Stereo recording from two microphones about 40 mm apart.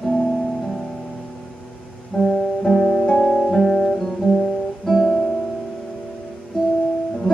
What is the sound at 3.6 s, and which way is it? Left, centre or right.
Guitar, centre.